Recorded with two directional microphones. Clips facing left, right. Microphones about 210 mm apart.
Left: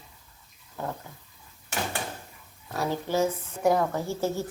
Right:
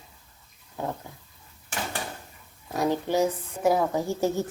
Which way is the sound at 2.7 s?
15° right (ahead or behind).